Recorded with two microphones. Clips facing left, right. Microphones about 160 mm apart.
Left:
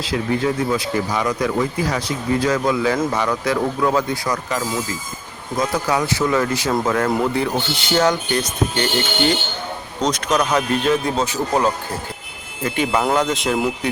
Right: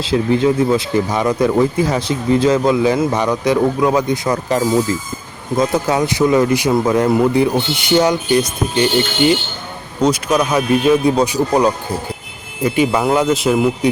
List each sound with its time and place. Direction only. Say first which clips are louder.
0.0 s speech: right 6 dB; 25° right (ahead or behind)
5.5 s speech: right 4 dB; 25° right (ahead or behind); by 13.7 s 5° right (ahead or behind)